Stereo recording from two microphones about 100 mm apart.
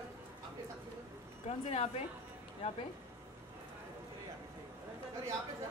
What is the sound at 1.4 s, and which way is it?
Speech, 90° left.